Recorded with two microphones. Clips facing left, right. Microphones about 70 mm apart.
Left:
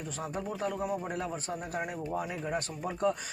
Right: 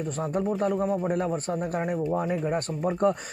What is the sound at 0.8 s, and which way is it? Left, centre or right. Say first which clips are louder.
Speech: right 8 dB; right.